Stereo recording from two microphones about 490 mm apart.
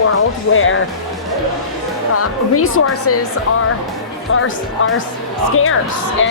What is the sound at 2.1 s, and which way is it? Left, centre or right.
A woman's voice, left.